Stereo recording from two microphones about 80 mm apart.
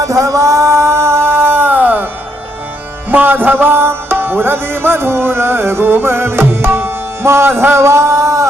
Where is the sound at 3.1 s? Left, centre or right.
Right.